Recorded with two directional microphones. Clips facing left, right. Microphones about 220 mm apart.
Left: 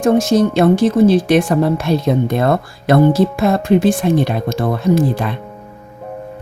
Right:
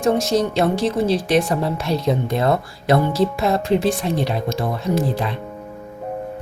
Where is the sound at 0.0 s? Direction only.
50° left (ahead or behind).